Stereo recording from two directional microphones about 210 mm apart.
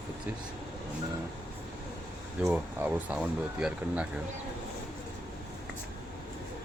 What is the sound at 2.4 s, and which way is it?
Speech, 5° right (ahead or behind).